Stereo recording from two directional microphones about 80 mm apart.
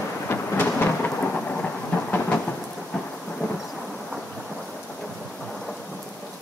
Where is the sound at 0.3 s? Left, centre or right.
Left.